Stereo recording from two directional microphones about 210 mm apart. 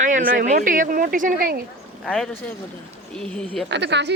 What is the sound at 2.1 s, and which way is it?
Speech, 5° left (ahead or behind).